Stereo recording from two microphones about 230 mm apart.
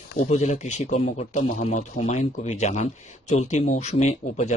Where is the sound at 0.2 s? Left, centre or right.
Left.